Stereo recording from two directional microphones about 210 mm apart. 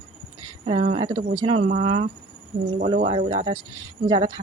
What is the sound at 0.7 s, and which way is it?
A woman's voice, 25° right (ahead or behind).